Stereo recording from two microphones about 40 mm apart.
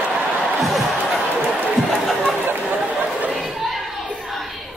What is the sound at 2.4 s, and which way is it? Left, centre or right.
Chatter, right.